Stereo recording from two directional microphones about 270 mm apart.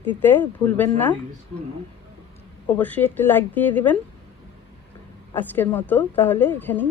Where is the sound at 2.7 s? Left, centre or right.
Centre.